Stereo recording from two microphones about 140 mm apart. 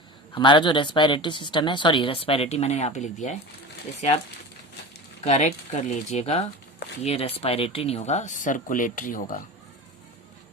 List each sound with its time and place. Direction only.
0.3 s speech: 35° left (ahead or behind); by 3.3 s 55° left (ahead or behind)
5.2 s speech: 55° left (ahead or behind); by 9.4 s 75° left (ahead or behind)